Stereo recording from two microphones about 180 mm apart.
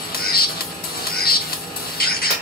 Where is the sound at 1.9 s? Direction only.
55° left (ahead or behind).